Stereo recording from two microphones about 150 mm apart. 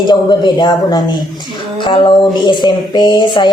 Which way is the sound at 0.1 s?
30° left (ahead or behind).